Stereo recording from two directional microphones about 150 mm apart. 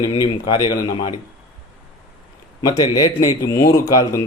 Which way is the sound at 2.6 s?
25° left (ahead or behind).